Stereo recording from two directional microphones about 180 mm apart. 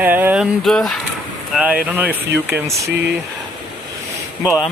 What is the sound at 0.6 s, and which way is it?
Speech, centre (ahead or behind).